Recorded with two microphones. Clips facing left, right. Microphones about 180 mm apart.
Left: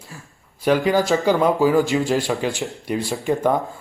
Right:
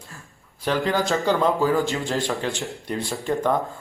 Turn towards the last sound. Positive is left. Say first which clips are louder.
# left 3 dB
turn(degrees=15)  # may be behind; listen again after turning